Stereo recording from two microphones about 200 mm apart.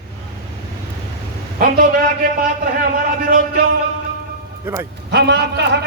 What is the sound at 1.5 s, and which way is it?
A man's voice, 45° right (ahead or behind).